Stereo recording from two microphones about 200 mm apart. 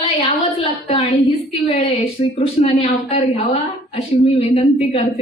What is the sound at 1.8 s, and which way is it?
A woman's voice, 30° left (ahead or behind).